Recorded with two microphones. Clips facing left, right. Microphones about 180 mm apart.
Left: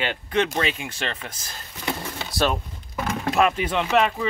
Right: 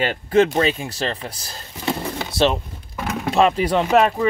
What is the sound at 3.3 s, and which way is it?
Speech, 30° right (ahead or behind).